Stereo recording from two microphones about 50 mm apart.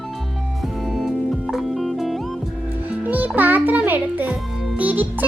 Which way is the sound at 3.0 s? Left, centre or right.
Right.